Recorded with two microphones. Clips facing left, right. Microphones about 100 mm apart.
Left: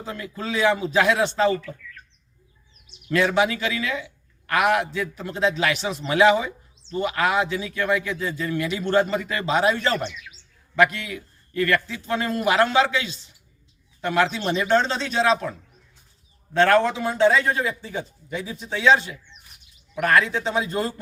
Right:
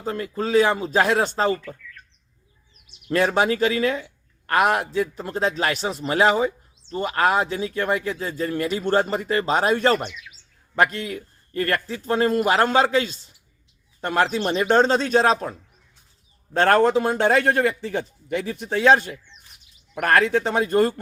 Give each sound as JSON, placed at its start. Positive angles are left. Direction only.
{"t": 0.0, "sound": "speech", "side_deg": -40}
{"t": 3.1, "sound": "a man's voice", "side_deg": -40}